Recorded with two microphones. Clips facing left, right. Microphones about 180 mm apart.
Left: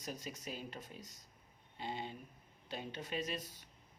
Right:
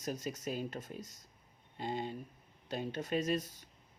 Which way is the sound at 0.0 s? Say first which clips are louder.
Right 7 dB; 45° right (ahead or behind).